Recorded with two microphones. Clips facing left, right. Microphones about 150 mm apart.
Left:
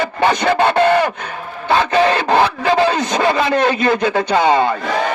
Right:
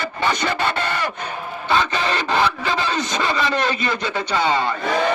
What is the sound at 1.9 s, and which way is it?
Radio, 60° left (ahead or behind).